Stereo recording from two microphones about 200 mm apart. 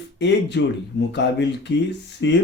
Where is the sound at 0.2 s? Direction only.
60° left (ahead or behind).